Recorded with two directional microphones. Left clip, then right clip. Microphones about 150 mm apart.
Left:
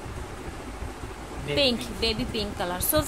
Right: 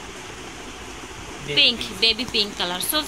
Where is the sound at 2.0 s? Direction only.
10° left (ahead or behind).